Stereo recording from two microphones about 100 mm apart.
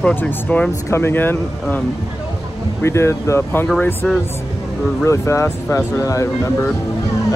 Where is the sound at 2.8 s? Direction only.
25° left (ahead or behind).